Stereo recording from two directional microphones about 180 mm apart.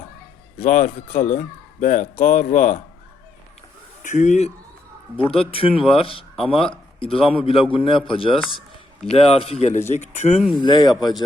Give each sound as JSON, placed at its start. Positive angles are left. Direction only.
{"t": 0.6, "sound": "speech", "side_deg": 45}
{"t": 4.0, "sound": "a man's voice", "side_deg": 40}
{"t": 10.6, "sound": "a man's voice", "side_deg": 25}